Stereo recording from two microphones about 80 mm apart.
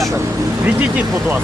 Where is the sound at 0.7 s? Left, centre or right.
Centre.